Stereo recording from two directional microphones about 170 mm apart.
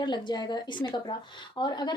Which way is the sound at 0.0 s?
25° left (ahead or behind).